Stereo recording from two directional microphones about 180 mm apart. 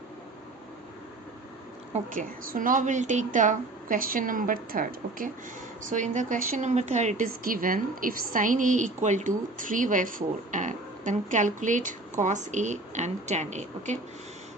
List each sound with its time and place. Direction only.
1.9 s a woman's voice: 50° right (ahead or behind)